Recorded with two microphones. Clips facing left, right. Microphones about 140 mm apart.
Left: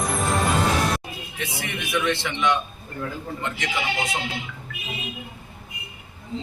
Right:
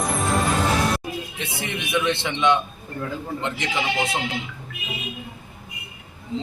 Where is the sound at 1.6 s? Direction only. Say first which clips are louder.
Right 2 dB; 20° right (ahead or behind).